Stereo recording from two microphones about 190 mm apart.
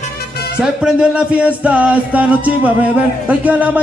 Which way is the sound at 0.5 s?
5° right (ahead or behind).